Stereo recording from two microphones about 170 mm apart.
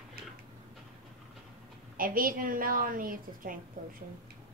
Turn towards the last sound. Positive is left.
turn(degrees=-55)  # may be behind; listen again after turning